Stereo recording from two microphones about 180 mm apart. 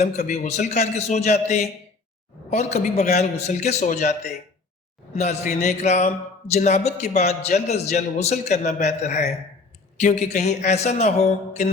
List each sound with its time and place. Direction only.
0.0 s a man's voice: 40° left (ahead or behind)